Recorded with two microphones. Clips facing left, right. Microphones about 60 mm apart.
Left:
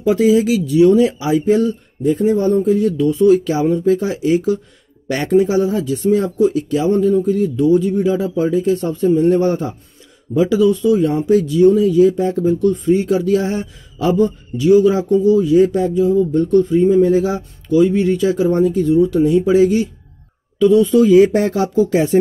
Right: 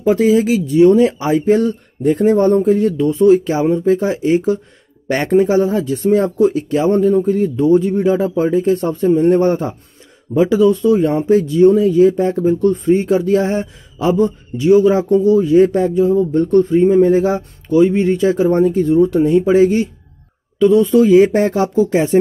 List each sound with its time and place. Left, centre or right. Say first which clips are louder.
0.0 s speech: right 1 dB; right
2.0 s speech: right 3 dB; right
21.0 s speech: even; right